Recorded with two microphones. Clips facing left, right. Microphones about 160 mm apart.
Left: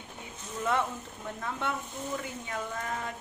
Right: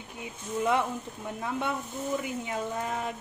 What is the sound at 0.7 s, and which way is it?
Speech, 15° right (ahead or behind).